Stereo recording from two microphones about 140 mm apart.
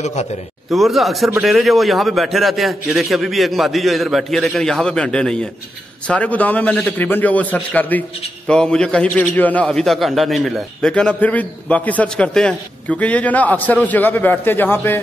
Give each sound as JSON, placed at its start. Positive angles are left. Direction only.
{"t": 0.0, "sound": "a man's voice", "side_deg": 55}
{"t": 0.7, "sound": "a man's voice", "side_deg": 0}